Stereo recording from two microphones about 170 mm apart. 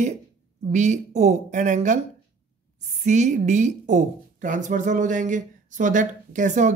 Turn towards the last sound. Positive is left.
turn(degrees=-45)  # may be behind; listen again after turning